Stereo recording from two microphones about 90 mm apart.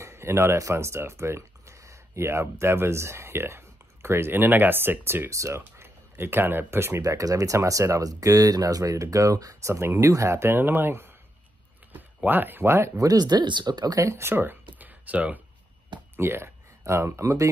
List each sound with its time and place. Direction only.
0.0 s speech: 30° right (ahead or behind)
7.0 s speech: 40° right (ahead or behind)
12.9 s speech: 45° right (ahead or behind)
13.9 s speech: 35° right (ahead or behind)
14.8 s a sound: 15° right (ahead or behind)
16.2 s speech: 25° right (ahead or behind)